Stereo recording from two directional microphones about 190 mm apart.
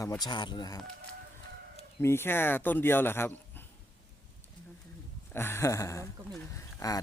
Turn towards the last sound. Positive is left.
turn(degrees=20)  # may be behind; listen again after turning